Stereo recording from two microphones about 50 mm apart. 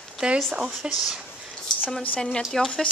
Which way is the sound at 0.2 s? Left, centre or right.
Centre.